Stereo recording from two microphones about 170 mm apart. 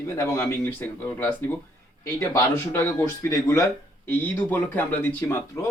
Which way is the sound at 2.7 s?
15° left (ahead or behind).